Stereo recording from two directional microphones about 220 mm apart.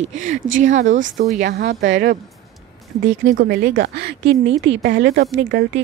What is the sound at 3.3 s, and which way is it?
Speech, 45° right (ahead or behind).